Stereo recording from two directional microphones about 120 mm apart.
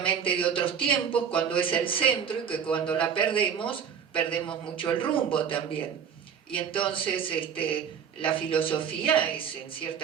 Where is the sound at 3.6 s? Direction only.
45° left (ahead or behind).